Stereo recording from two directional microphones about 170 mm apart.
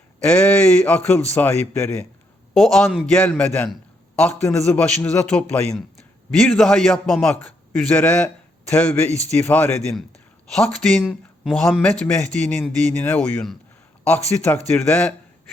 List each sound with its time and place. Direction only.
0.2 s a man's voice: 5° left (ahead or behind)
4.4 s a man's voice: 15° left (ahead or behind)